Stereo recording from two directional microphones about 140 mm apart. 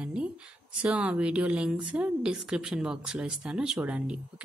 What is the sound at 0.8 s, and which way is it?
A woman's voice, 10° right (ahead or behind).